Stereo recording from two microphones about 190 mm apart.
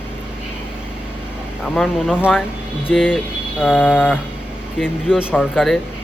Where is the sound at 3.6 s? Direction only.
10° left (ahead or behind).